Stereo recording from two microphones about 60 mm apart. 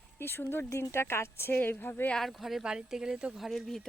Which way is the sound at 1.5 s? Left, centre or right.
Left.